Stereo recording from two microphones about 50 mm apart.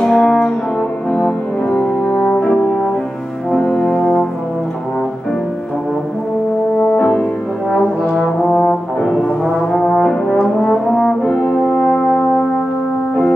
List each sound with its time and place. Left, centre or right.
0.0 s brass instrument: centre
1.1 s brass instrument: left
3.5 s music: left
6.8 s french horn: left
7.7 s brass instrument: centre
11.2 s french horn: left